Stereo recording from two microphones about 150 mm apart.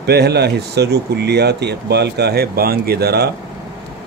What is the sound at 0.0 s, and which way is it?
Speech, 90° right.